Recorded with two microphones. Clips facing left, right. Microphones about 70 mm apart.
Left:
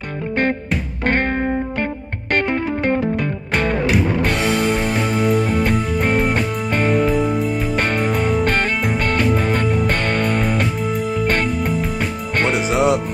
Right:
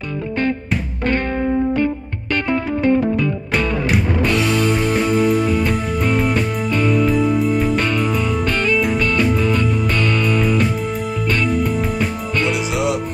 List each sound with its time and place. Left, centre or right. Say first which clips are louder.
2.3 s music: even; left
4.2 s music: right 1 dB; left
7.1 s music: right 2 dB; centre
7.7 s music: right 1 dB; left
11.5 s music: right 2 dB; centre
12.4 s music: left 3 dB; left